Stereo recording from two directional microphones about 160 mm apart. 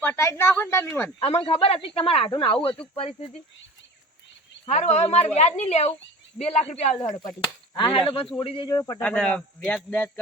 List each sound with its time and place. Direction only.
0.0 s speech: 15° left (ahead or behind)
1.2 s a man's voice: 35° left (ahead or behind)
4.6 s a man's voice: 45° left (ahead or behind)
7.2 s a man's voice: 25° left (ahead or behind)
9.0 s speech: 5° left (ahead or behind)